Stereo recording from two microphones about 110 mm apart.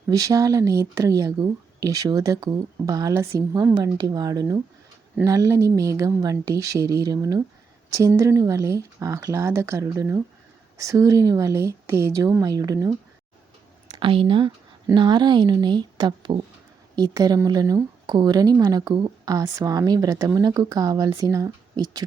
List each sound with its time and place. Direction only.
0.1 s speech: 35° right (ahead or behind)
13.9 s speech: 55° right (ahead or behind); by 22.0 s 35° right (ahead or behind)